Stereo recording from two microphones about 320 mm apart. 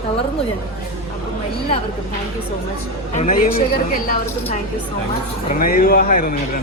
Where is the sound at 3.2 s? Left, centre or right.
Left.